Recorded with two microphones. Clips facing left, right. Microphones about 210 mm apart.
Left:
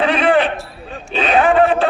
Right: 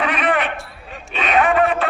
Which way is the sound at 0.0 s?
30° left (ahead or behind).